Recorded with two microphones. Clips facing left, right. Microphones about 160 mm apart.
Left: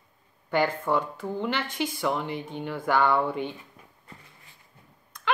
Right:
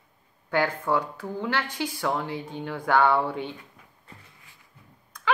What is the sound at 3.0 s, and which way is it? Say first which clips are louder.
Speech: right 2 dB; 10° right (ahead or behind).